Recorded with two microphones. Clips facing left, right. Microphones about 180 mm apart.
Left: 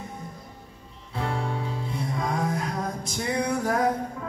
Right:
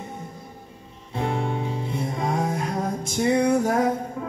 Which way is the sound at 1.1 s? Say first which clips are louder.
Right 4 dB; 25° right (ahead or behind).